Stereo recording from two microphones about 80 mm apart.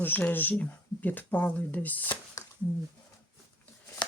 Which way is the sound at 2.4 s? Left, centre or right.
Left.